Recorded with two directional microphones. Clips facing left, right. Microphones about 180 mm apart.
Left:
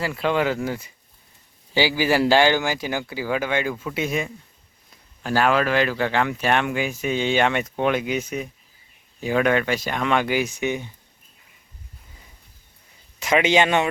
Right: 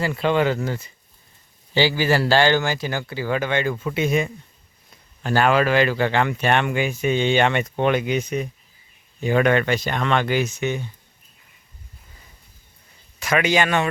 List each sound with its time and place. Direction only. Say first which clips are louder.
0.0 s speech: right 2 dB; centre (ahead or behind)
13.1 s a man's voice: left 1 dB; 20° left (ahead or behind)